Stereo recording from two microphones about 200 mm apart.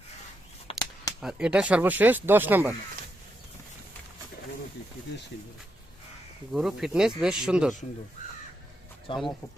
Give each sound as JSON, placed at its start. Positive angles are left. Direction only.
{"t": 0.7, "sound": "a sound", "side_deg": 20}
{"t": 1.2, "sound": "speech", "side_deg": -5}
{"t": 6.5, "sound": "speech", "side_deg": -5}
{"t": 9.1, "sound": "speech", "side_deg": 25}